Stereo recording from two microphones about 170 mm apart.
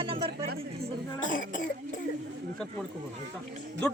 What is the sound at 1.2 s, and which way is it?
Speech, 50° left (ahead or behind).